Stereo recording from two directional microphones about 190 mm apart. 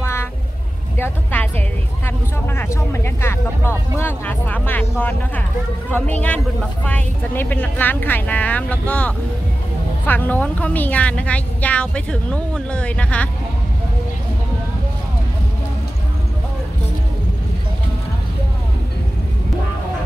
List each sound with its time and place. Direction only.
0.0 s vehicle: 15° left (ahead or behind)
0.9 s music: 10° left (ahead or behind)
2.0 s speech: 10° left (ahead or behind)